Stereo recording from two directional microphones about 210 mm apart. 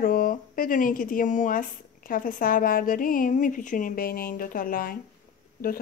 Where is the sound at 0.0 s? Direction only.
40° left (ahead or behind).